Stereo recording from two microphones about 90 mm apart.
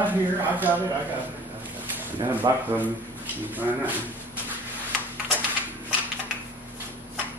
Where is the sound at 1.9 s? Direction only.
20° right (ahead or behind).